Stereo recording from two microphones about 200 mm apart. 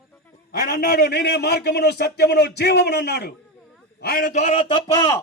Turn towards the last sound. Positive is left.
turn(degrees=15)  # may be behind; listen again after turning